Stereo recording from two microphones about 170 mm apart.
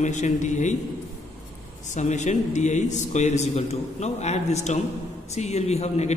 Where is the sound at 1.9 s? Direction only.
45° left (ahead or behind).